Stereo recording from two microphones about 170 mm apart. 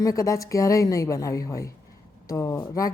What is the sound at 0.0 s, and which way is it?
A woman's voice, 20° left (ahead or behind).